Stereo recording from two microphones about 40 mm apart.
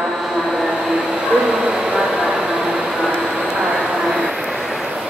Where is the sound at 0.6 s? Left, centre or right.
Centre.